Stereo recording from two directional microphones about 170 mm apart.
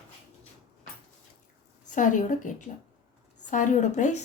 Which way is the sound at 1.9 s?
50° left (ahead or behind).